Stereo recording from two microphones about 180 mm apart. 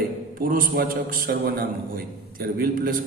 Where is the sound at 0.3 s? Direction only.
55° right (ahead or behind).